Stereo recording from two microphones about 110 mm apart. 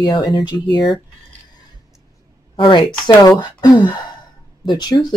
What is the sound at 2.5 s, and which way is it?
Speech, 50° left (ahead or behind).